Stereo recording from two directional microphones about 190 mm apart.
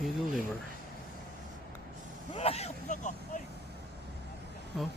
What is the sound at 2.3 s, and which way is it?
Speech, 30° left (ahead or behind).